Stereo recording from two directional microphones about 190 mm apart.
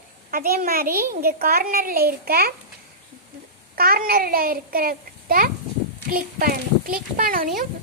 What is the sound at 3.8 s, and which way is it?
A child's voice, 50° right (ahead or behind).